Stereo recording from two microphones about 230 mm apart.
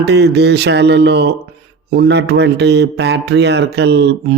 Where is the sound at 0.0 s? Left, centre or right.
Right.